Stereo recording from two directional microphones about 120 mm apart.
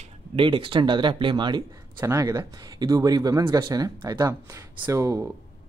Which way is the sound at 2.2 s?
35° right (ahead or behind).